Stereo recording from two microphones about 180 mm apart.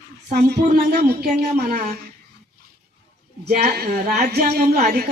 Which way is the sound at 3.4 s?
60° right (ahead or behind).